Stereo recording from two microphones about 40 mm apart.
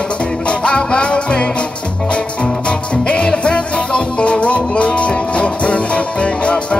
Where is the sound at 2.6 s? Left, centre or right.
Left.